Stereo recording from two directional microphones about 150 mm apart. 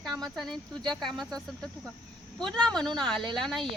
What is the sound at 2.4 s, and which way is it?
A woman's voice, 5° left (ahead or behind).